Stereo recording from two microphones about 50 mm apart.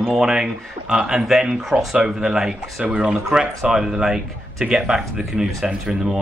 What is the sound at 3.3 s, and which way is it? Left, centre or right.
Speech, centre.